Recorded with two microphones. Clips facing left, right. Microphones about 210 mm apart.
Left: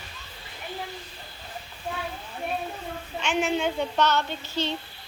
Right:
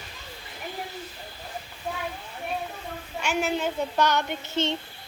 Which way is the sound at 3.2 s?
5° right (ahead or behind).